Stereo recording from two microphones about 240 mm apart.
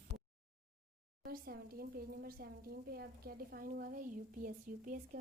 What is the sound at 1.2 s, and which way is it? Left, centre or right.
A woman's voice, right.